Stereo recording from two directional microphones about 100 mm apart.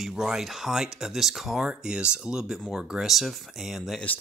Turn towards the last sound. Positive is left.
turn(degrees=0)  # may be behind; listen again after turning